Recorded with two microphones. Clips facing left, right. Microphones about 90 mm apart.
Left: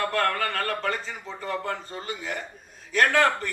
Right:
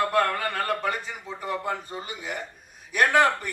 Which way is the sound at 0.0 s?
15° right (ahead or behind).